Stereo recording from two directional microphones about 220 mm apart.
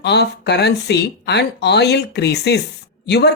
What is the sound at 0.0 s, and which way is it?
Speech, 50° left (ahead or behind).